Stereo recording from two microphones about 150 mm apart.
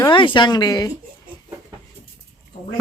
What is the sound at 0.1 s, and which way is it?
Speech, 35° left (ahead or behind).